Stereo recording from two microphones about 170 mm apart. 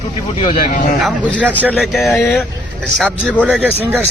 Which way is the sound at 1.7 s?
Centre (ahead or behind).